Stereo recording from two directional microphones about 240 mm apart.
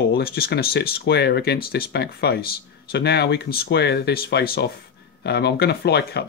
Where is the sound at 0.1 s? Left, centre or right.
Left.